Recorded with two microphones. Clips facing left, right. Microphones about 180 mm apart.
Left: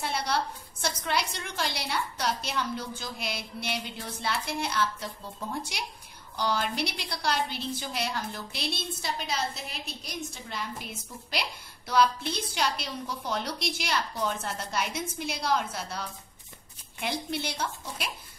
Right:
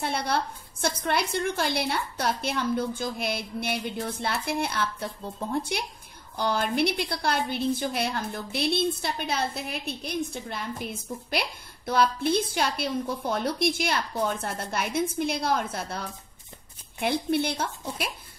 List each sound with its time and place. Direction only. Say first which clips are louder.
0.0 s a woman's voice: right 2 dB; 55° right (ahead or behind)
17.0 s a woman's voice: right 7 dB; 55° right (ahead or behind)